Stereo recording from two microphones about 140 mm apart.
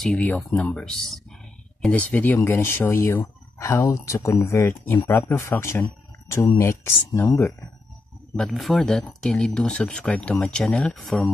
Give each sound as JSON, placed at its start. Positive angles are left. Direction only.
{"t": 0.0, "sound": "speech", "side_deg": 10}
{"t": 8.4, "sound": "speech", "side_deg": 0}